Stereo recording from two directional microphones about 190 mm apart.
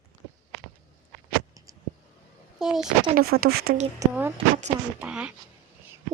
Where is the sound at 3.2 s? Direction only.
55° right (ahead or behind).